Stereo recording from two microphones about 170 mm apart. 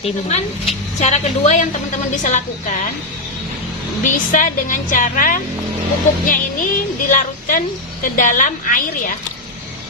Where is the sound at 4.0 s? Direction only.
50° left (ahead or behind).